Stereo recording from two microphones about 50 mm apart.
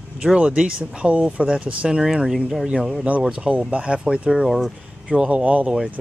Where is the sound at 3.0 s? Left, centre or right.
Centre.